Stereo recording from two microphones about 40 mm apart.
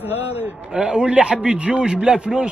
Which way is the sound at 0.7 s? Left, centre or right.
Right.